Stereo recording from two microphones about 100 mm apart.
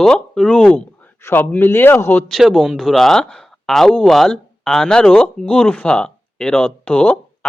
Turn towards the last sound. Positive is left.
turn(degrees=15)  # may be behind; listen again after turning